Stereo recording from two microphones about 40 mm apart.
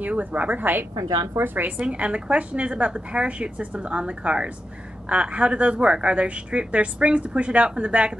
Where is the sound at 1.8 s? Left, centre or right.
Right.